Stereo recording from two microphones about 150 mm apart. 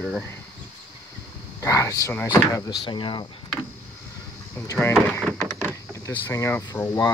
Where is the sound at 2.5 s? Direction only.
30° left (ahead or behind).